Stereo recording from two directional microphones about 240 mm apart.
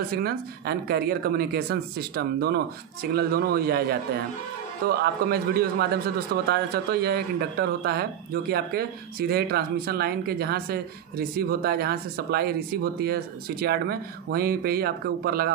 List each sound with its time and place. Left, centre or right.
0.1 s a man's voice: right